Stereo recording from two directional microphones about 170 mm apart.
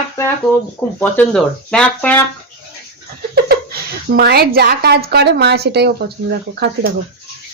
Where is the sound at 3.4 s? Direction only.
65° right (ahead or behind).